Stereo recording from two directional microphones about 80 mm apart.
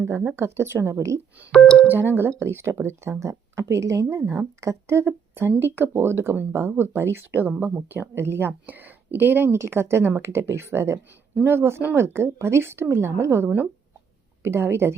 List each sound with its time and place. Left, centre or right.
0.3 s a woman's voice: right
1.5 s speech: centre
1.9 s a woman's voice: right